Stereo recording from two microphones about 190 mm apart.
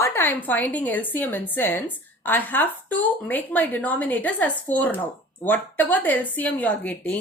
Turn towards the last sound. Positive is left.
turn(degrees=5)  # may be behind; listen again after turning